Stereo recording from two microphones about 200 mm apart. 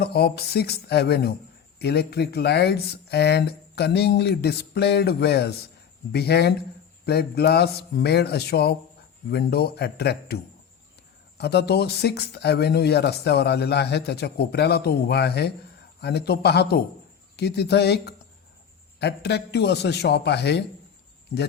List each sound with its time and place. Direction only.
0.0 s a man's voice: 50° left (ahead or behind)
11.3 s speech: 55° left (ahead or behind)